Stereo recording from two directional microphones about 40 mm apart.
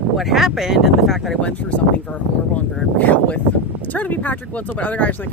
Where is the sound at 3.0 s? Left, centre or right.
Left.